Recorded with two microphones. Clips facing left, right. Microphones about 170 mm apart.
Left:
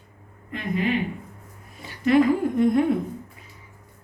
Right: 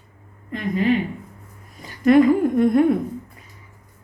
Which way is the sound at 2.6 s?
55° right (ahead or behind).